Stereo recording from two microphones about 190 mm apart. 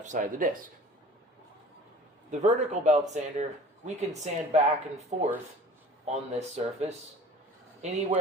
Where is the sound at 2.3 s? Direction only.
40° right (ahead or behind).